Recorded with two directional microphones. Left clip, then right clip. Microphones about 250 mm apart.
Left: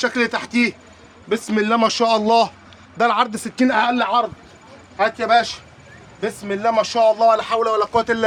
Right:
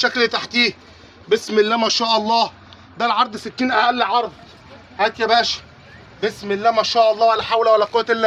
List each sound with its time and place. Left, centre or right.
0.0 s a man's voice: left